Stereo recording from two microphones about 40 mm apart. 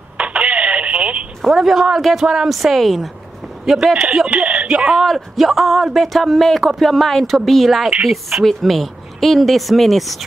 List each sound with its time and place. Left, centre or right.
0.2 s telephone: right
1.4 s a woman's voice: centre
4.3 s speech: right
4.6 s speech: centre
4.9 s speech: centre